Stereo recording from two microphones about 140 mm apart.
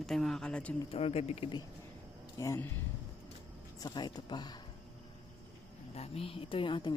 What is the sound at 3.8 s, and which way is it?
Speech, 30° left (ahead or behind).